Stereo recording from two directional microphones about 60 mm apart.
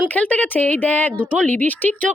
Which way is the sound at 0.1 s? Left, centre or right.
Left.